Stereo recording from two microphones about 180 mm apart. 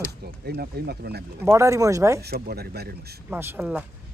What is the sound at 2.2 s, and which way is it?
Speech, 60° right (ahead or behind).